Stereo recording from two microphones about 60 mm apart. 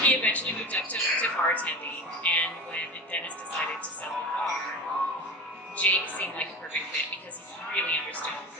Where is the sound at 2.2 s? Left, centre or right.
Left.